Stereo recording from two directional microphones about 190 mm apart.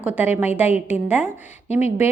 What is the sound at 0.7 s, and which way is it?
A woman's voice, 35° left (ahead or behind).